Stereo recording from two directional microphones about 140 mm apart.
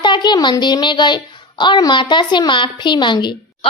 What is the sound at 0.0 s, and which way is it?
A woman's voice, 35° left (ahead or behind).